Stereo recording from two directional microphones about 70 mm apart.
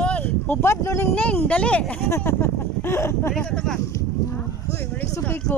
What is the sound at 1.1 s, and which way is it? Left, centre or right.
Speech, left.